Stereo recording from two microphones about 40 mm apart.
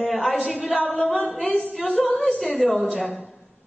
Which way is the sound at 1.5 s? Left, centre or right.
Left.